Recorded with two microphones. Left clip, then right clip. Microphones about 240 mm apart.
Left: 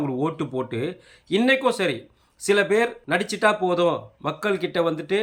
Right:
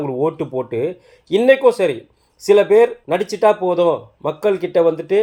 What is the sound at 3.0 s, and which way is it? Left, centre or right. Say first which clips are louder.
Speech: right 5 dB; centre.